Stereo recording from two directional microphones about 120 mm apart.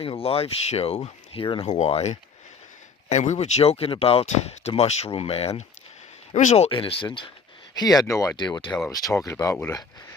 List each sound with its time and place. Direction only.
0.0 s speech: 50° left (ahead or behind)
1.7 s speech: 65° left (ahead or behind)
6.3 s speech: 80° left
6.7 s speech: 50° left (ahead or behind)
7.8 s speech: 30° left (ahead or behind)